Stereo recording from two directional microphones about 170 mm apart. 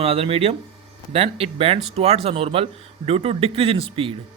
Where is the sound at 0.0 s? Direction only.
35° right (ahead or behind).